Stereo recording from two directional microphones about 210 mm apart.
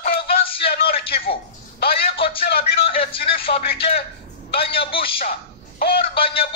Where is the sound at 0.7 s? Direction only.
45° left (ahead or behind).